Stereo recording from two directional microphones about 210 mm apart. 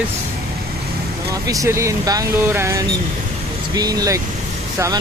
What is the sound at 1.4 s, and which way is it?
Speech, 15° right (ahead or behind).